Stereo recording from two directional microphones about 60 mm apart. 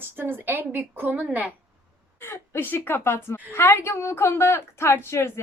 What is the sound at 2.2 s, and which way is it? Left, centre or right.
A woman's voice, left.